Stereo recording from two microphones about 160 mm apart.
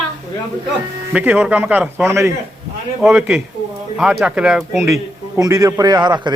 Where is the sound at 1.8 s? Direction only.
Centre (ahead or behind).